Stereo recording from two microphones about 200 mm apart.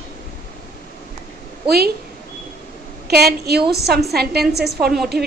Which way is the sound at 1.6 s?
55° right (ahead or behind).